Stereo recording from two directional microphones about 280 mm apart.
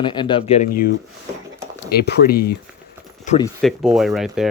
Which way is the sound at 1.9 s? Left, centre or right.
Left.